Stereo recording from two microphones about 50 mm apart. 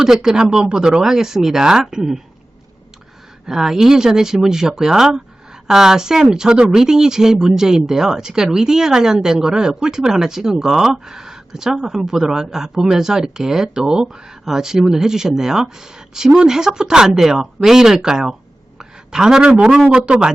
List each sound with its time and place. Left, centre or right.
0.0 s speech: centre
3.4 s speech: centre
18.8 s a sound: centre
19.9 s speech: centre